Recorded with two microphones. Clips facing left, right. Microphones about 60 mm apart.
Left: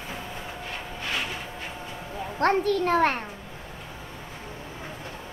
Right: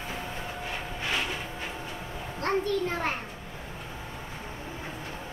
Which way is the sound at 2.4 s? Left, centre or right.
Left.